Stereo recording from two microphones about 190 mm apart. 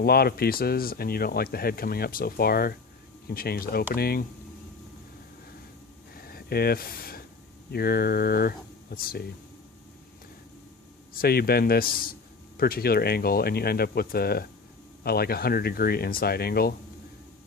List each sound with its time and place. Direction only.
0.0 s speech: 55° left (ahead or behind)
6.1 s a sound: 50° left (ahead or behind)
7.7 s speech: 55° left (ahead or behind)
11.1 s speech: 50° left (ahead or behind)